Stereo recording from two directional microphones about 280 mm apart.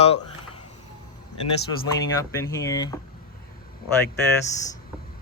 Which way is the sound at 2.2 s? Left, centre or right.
Centre.